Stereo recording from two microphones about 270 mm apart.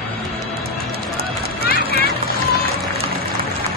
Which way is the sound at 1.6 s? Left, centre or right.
Left.